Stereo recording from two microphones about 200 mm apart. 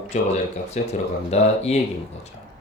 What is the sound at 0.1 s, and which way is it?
Speech, 35° left (ahead or behind).